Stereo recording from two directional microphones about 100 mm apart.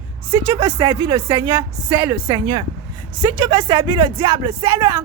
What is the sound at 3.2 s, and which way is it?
Speech, 35° right (ahead or behind).